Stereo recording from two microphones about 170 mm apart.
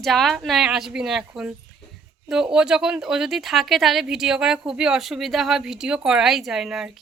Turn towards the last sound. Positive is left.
turn(degrees=0)  # may be behind; listen again after turning